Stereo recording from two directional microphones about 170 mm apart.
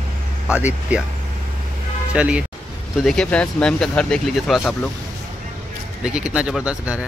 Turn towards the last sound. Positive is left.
turn(degrees=-5)  # may be behind; listen again after turning